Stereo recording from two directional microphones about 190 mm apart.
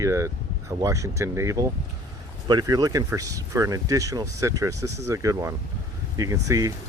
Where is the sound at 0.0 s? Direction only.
15° right (ahead or behind).